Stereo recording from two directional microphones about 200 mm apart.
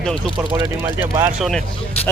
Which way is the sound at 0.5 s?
20° right (ahead or behind).